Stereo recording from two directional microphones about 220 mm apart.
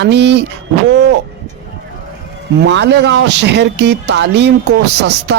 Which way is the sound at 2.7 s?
55° right (ahead or behind).